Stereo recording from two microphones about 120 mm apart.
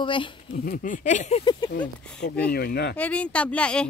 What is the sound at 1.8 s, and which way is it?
Speech, 10° left (ahead or behind).